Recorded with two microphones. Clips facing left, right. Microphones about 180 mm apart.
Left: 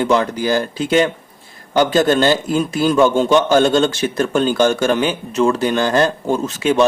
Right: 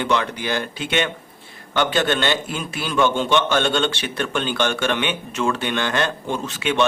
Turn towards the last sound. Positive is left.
turn(degrees=40)  # may be behind; listen again after turning